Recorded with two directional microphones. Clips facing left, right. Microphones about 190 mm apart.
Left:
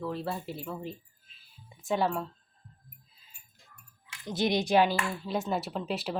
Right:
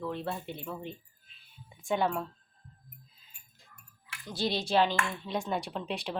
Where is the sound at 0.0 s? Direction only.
Centre (ahead or behind).